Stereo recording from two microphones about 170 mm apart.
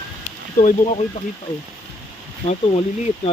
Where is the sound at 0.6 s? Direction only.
40° left (ahead or behind).